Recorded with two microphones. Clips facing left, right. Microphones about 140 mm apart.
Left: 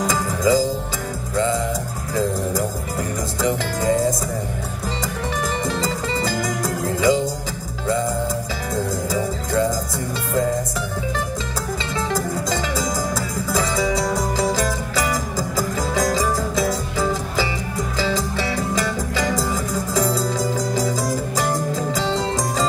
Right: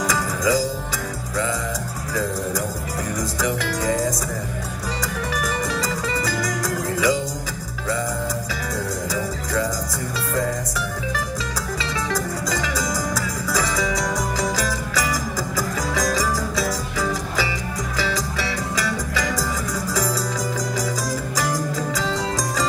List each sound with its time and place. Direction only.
0.0 s music: 25° left (ahead or behind)
3.4 s music: 25° left (ahead or behind)
5.3 s music: 25° left (ahead or behind)
8.7 s music: 25° left (ahead or behind)
12.1 s music: 25° left (ahead or behind)
21.4 s music: 25° left (ahead or behind)